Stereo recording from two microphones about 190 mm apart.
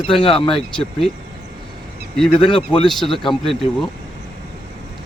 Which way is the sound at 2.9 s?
Centre (ahead or behind).